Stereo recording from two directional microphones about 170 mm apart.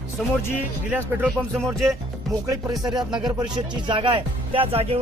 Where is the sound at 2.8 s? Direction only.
25° right (ahead or behind).